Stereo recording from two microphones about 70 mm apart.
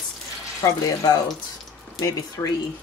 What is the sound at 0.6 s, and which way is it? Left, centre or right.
Speech, left.